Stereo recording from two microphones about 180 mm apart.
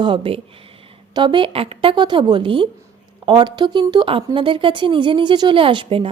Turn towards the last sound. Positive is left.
turn(degrees=-30)  # may be behind; listen again after turning